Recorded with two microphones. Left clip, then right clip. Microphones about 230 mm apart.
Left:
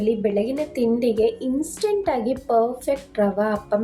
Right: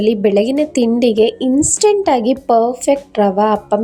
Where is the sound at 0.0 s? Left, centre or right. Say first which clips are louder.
Right 8 dB; right.